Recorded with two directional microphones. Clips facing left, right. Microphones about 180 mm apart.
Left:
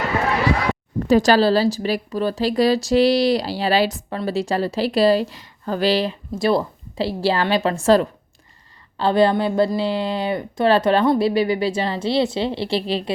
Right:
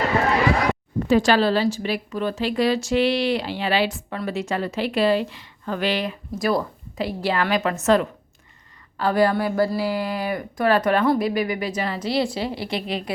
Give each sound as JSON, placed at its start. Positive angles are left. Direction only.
{"t": 1.0, "sound": "a woman's voice", "side_deg": 40}